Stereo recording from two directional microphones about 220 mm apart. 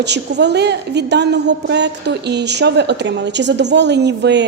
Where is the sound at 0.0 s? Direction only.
50° right (ahead or behind).